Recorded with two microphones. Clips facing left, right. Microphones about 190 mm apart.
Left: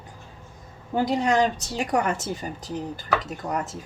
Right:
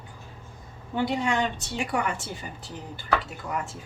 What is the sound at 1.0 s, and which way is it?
A woman's voice, 40° left (ahead or behind).